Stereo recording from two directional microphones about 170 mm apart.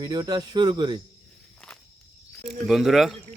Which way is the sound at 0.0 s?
25° right (ahead or behind).